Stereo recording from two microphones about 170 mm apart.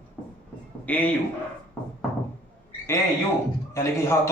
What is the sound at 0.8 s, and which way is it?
Speech, 10° left (ahead or behind).